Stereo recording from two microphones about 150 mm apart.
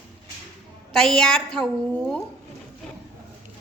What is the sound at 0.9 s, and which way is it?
A woman's voice, 5° left (ahead or behind).